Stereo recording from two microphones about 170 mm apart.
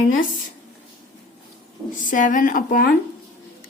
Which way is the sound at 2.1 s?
50° left (ahead or behind).